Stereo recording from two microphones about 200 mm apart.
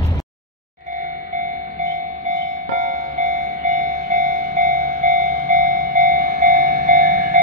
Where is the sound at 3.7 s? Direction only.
40° right (ahead or behind).